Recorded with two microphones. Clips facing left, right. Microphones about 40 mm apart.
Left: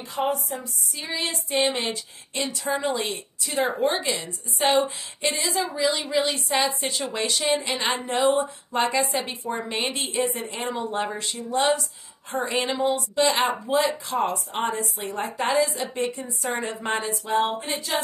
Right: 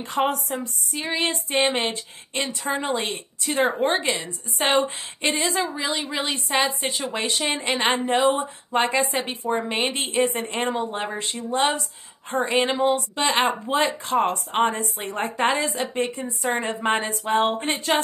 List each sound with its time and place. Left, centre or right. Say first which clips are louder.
0.1 s speech: right 2 dB; right
6.0 s a woman's voice: left 3 dB; right
10.8 s speech: even; centre
11.1 s speech: right 1 dB; right
16.9 s a sound: right 1 dB; right